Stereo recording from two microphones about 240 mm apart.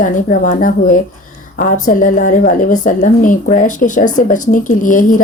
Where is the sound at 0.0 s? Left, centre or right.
Left.